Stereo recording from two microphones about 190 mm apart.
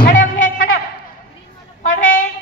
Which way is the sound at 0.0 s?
45° left (ahead or behind).